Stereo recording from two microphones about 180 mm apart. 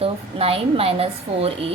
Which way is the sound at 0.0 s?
35° right (ahead or behind).